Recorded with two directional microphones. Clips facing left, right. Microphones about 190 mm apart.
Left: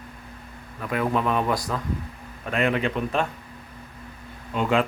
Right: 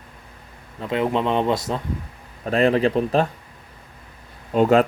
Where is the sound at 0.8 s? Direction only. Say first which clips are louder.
Right 3 dB; 25° right (ahead or behind).